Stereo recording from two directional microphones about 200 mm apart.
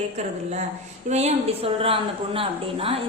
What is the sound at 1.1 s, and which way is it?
A woman's voice, 35° right (ahead or behind).